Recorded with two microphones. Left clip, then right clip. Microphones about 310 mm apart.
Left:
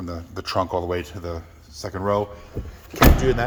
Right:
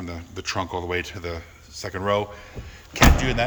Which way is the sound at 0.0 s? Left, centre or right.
Centre.